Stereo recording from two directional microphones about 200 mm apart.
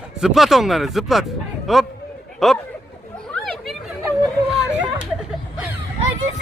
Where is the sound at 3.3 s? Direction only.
5° left (ahead or behind).